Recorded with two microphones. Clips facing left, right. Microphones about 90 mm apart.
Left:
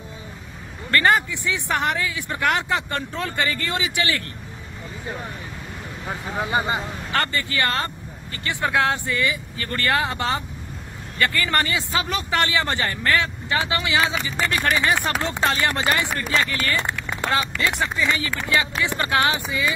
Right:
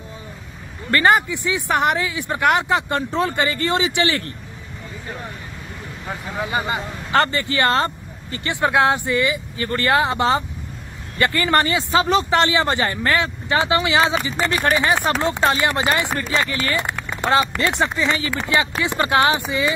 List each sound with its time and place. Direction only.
0.9 s speech: 20° right (ahead or behind)
6.0 s speech: 20° left (ahead or behind)
7.1 s speech: 25° right (ahead or behind)
17.6 s speech: 30° right (ahead or behind)